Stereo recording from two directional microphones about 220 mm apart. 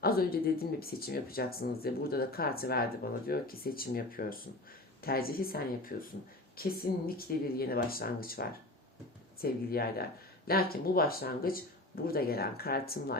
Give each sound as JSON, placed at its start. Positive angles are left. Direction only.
{"t": 0.0, "sound": "speech", "side_deg": 45}